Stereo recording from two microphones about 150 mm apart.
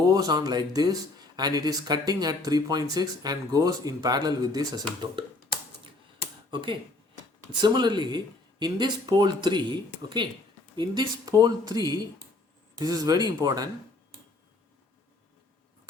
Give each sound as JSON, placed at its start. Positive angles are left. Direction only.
{"t": 0.0, "sound": "speech", "side_deg": -25}
{"t": 6.5, "sound": "speech", "side_deg": -35}